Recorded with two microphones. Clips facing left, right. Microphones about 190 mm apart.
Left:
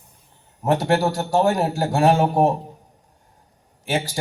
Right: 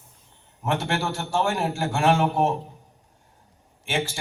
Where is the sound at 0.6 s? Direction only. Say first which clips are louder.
Left 7 dB; 40° left (ahead or behind).